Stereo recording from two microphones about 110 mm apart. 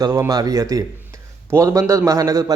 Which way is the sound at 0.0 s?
30° right (ahead or behind).